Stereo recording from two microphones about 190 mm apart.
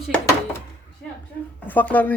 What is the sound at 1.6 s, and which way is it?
Speech, 10° left (ahead or behind).